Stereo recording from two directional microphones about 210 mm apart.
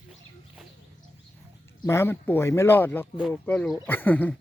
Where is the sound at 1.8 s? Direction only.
10° left (ahead or behind).